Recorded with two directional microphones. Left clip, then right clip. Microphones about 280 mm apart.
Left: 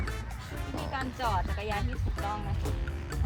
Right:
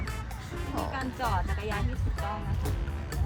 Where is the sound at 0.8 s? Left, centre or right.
Centre.